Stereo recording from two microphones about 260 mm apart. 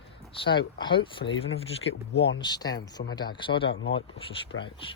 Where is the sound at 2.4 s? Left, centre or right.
Centre.